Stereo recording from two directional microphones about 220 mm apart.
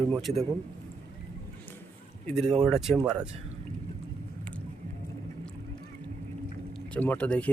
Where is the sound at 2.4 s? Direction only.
25° right (ahead or behind).